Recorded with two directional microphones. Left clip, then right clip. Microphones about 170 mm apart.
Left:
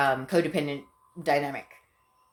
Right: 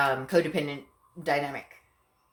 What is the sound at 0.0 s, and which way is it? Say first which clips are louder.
Speech: even; 35° left (ahead or behind).